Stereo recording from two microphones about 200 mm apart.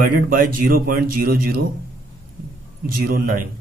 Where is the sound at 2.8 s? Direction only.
50° right (ahead or behind).